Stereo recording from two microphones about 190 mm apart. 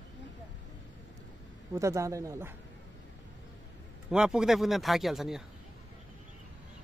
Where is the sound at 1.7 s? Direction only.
15° right (ahead or behind).